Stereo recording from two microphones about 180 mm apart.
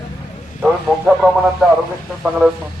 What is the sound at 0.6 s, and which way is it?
Speech, 5° right (ahead or behind).